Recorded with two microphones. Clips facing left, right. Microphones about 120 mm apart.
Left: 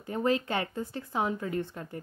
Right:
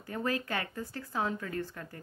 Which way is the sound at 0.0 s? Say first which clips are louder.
Left 6 dB; 20° left (ahead or behind).